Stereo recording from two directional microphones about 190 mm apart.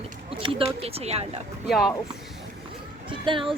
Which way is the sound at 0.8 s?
30° right (ahead or behind).